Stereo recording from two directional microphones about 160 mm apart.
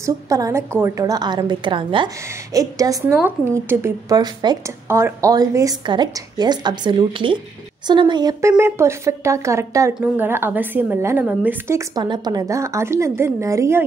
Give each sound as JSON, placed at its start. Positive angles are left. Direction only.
{"t": 0.0, "sound": "a woman's voice", "side_deg": -20}
{"t": 4.8, "sound": "a woman's voice", "side_deg": -15}